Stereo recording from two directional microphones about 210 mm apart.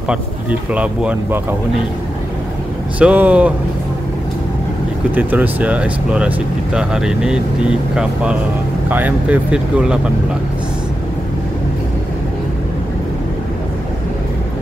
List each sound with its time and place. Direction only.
0.1 s speech: 5° right (ahead or behind)
3.0 s speech: 5° right (ahead or behind)
5.1 s speech: 10° right (ahead or behind)